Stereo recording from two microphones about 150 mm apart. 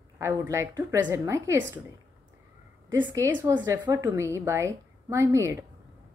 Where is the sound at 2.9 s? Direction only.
15° right (ahead or behind).